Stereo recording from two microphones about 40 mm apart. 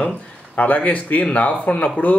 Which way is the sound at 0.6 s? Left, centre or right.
Left.